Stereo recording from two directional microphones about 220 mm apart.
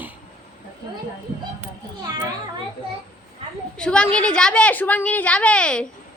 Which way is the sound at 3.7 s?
5° left (ahead or behind).